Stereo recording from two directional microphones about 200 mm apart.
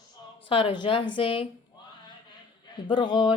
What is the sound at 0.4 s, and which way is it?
Speech, 25° left (ahead or behind).